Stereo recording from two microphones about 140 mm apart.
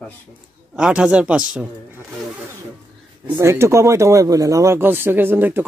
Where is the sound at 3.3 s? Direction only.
20° right (ahead or behind).